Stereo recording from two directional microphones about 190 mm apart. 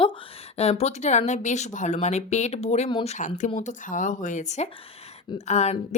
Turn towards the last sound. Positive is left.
turn(degrees=35)  # may be behind; listen again after turning